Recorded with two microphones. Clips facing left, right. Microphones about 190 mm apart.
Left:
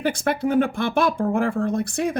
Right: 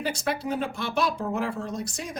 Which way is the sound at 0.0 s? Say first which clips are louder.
Left 6 dB; 55° left (ahead or behind).